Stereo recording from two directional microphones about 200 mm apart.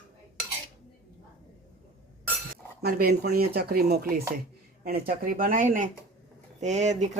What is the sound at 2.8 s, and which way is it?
Speech, 50° right (ahead or behind).